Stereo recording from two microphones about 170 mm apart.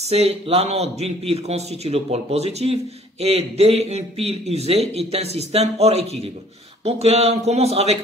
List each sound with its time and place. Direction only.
0.0 s a man's voice: 35° right (ahead or behind)